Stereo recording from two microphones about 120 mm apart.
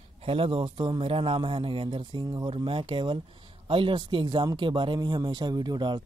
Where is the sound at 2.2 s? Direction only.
35° right (ahead or behind).